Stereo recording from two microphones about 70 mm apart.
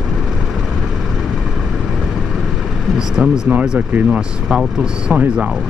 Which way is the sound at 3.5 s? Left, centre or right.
Right.